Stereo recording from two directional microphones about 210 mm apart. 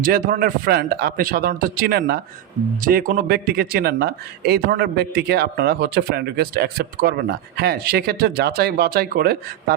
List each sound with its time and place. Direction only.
0.0 s speech: 40° right (ahead or behind)